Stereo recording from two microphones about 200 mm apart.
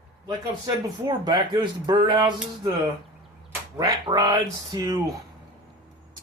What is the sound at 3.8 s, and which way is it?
Speech, 20° right (ahead or behind).